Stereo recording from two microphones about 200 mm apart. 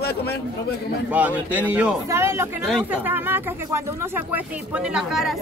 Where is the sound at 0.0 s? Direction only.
55° left (ahead or behind).